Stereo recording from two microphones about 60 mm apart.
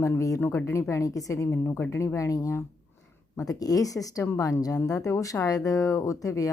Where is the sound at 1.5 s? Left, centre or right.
Left.